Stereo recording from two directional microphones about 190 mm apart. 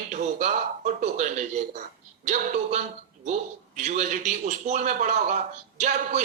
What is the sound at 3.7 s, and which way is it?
Speech, 35° right (ahead or behind).